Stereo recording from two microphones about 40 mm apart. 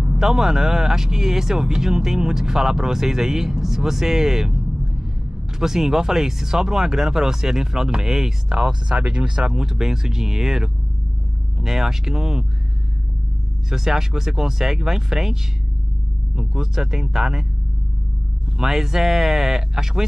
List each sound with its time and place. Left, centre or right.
0.2 s speech: centre
13.7 s speech: centre
16.3 s speech: centre
18.6 s speech: centre